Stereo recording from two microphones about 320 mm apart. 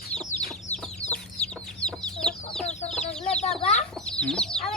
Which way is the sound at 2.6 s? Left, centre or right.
Left.